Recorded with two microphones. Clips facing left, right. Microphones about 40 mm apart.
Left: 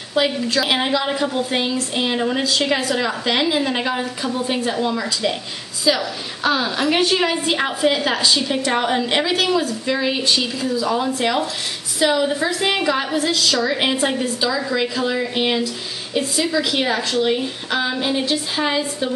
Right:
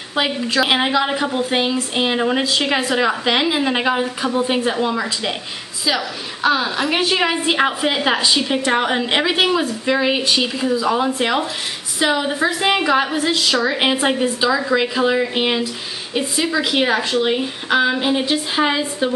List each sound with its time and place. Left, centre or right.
0.1 s a woman's voice: centre